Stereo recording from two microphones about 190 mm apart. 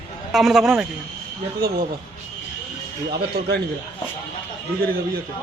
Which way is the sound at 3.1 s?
60° right (ahead or behind).